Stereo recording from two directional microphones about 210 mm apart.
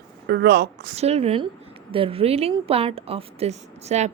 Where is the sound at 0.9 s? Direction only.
30° right (ahead or behind).